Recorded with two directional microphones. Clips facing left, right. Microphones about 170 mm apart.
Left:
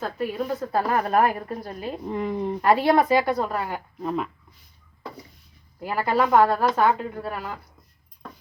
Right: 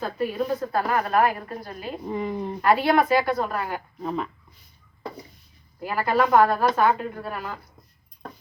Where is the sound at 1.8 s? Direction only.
Centre (ahead or behind).